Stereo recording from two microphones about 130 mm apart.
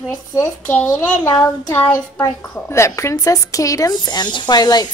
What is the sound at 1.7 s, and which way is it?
A woman's voice, 15° left (ahead or behind).